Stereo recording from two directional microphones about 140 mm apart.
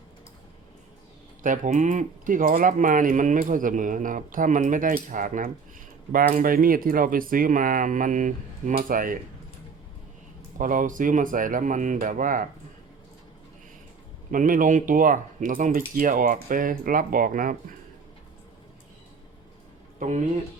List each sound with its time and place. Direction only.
1.4 s speech: 70° right (ahead or behind)
6.1 s speech: 90° right
10.6 s speech: 70° right (ahead or behind)
14.3 s speech: 70° right (ahead or behind)
20.0 s speech: 60° right (ahead or behind)